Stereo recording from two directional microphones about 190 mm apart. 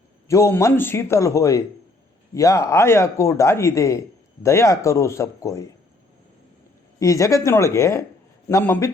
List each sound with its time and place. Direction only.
0.3 s speech: 15° left (ahead or behind)
7.0 s speech: 15° left (ahead or behind)